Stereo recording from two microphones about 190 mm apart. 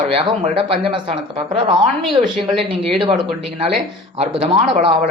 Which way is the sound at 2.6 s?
25° right (ahead or behind).